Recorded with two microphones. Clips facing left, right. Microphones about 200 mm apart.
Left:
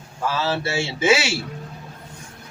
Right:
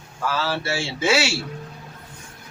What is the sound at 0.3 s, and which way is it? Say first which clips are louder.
A man's voice: left 1 dB; 25° left (ahead or behind).